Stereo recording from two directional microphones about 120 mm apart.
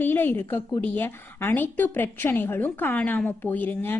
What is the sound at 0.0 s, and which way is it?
Speech, 15° left (ahead or behind).